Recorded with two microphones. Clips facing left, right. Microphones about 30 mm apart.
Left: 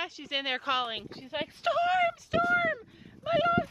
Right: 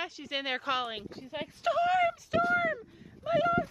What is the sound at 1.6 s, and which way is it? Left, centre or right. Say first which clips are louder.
Speech: even; centre.